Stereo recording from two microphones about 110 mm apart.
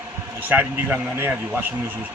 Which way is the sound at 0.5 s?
15° right (ahead or behind).